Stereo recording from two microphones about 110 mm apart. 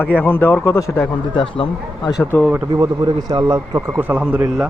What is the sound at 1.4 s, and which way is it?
Speech, 50° left (ahead or behind).